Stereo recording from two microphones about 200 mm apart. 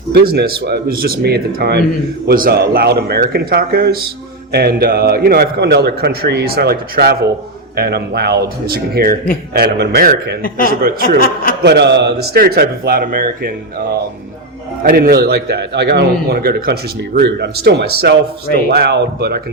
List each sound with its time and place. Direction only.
0.1 s a man's voice: 55° right (ahead or behind)